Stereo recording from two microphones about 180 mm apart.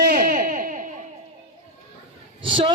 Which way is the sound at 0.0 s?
55° right (ahead or behind).